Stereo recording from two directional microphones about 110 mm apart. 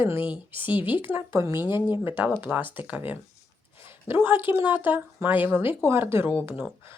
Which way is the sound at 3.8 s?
20° right (ahead or behind).